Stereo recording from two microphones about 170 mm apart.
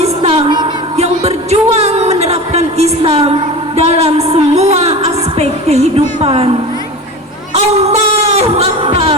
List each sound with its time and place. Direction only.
0.0 s music: 35° right (ahead or behind)
7.5 s a sound: 40° right (ahead or behind)
8.4 s wail: 35° right (ahead or behind)